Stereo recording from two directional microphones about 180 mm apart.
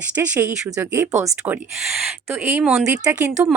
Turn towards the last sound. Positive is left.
turn(degrees=-15)  # may be behind; listen again after turning